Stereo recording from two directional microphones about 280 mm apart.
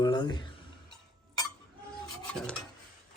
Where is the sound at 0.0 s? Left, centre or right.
Centre.